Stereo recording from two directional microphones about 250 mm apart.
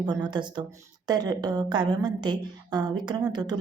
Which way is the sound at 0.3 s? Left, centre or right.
Centre.